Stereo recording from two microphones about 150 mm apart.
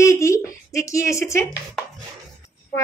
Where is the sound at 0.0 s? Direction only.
20° left (ahead or behind).